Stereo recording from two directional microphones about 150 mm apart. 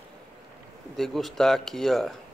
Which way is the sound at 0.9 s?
Centre (ahead or behind).